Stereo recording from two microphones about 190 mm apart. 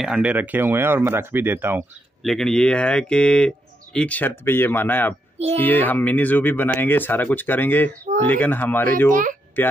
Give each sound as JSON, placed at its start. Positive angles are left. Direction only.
{"t": 0.0, "sound": "speech", "side_deg": -5}
{"t": 2.2, "sound": "speech", "side_deg": 5}
{"t": 9.1, "sound": "speech", "side_deg": -45}